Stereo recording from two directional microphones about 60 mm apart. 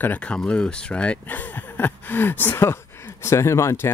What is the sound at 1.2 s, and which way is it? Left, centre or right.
Speech, left.